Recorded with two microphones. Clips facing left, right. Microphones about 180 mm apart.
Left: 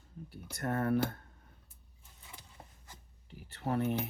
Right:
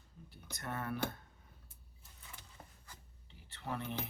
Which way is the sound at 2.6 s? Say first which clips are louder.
Left 1 dB; 25° left (ahead or behind).